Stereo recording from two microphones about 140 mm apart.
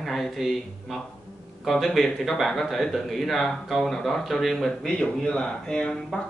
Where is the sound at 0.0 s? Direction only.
Centre (ahead or behind).